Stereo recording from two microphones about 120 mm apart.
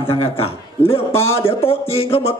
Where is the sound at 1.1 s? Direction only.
20° left (ahead or behind).